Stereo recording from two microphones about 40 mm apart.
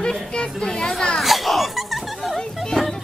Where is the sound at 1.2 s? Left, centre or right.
Centre.